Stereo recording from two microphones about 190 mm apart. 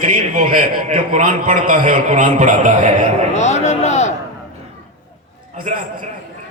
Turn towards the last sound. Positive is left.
turn(degrees=-45)  # may be behind; listen again after turning